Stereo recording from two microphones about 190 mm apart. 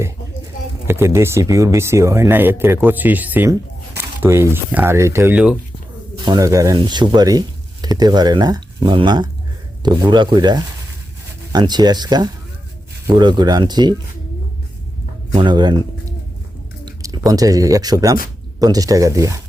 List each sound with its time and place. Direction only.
0.9 s speech: 15° right (ahead or behind)
6.2 s speech: 20° right (ahead or behind)
15.3 s speech: 25° right (ahead or behind)